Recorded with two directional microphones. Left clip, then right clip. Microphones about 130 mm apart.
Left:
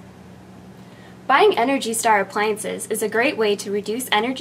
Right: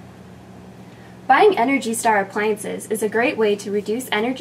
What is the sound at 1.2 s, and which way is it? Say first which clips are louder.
A woman's voice: right 1 dB; 35° left (ahead or behind).